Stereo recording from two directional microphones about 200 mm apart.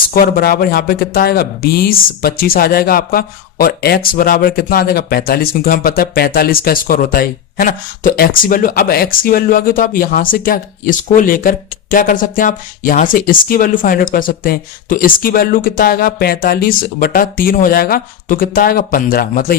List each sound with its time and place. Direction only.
0.1 s speech: 50° left (ahead or behind)